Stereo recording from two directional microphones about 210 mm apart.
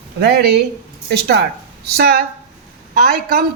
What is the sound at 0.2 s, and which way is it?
Speech, 50° right (ahead or behind).